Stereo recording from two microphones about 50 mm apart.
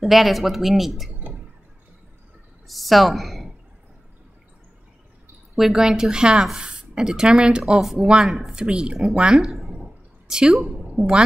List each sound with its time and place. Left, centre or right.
0.0 s speech: centre
2.7 s a woman's voice: centre
5.6 s speech: centre
6.5 s a sound: centre
7.1 s speech: centre
8.5 s speech: centre
10.2 s a woman's voice: centre